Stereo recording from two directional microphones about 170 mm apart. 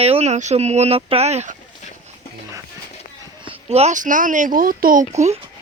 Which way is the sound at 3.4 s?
35° right (ahead or behind).